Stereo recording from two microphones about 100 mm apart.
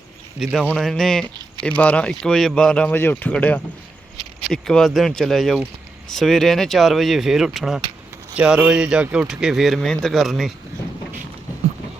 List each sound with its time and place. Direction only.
0.3 s speech: centre (ahead or behind)
2.9 s speech: 20° left (ahead or behind); by 10.5 s centre (ahead or behind)